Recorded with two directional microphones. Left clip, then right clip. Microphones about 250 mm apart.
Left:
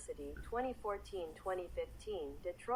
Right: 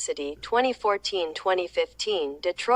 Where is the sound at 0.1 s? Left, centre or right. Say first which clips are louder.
Right 16 dB; right.